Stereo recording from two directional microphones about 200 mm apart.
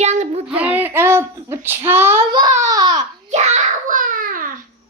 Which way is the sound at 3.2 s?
35° right (ahead or behind).